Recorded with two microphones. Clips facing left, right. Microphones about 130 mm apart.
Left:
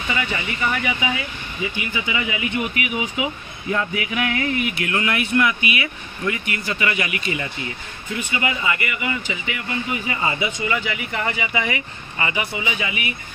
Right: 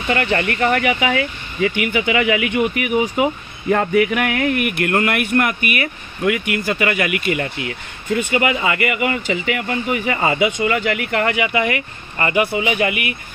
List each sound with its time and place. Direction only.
0.1 s speech: 65° right (ahead or behind)
2.6 s speech: 50° right (ahead or behind)
6.6 s speech: 50° right (ahead or behind); by 8.2 s 65° right (ahead or behind)
8.4 s speech: 90° right; by 13.1 s 60° right (ahead or behind)